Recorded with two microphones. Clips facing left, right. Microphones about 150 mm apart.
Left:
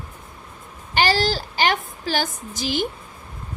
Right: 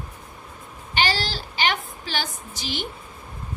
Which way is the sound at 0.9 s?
45° left (ahead or behind).